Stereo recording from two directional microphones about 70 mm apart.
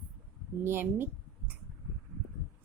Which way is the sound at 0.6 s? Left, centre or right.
Right.